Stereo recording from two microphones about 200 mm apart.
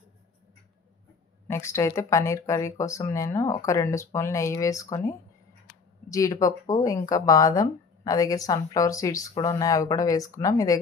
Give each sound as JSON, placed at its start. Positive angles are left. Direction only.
{"t": 1.5, "sound": "speech", "side_deg": 15}